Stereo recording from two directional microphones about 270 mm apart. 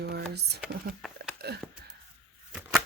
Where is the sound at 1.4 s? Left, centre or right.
Right.